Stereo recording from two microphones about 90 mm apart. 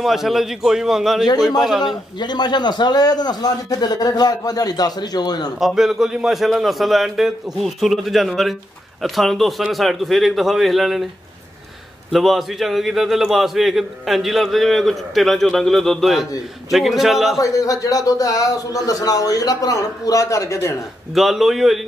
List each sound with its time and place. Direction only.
0.0 s a man's voice: 5° right (ahead or behind)
2.1 s a man's voice: 55° left (ahead or behind)
5.8 s a man's voice: 5° right (ahead or behind)
12.1 s a man's voice: centre (ahead or behind)
17.4 s speech: 40° left (ahead or behind)
21.1 s a man's voice: 5° right (ahead or behind)